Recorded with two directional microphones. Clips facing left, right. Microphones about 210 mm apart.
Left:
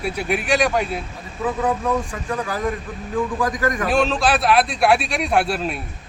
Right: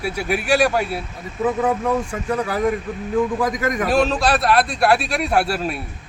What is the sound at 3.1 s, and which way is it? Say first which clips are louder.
Speech: right 2 dB; 20° right (ahead or behind).